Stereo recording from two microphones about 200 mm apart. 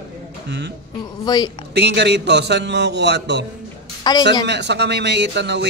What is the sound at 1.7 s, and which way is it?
Speech, 55° right (ahead or behind).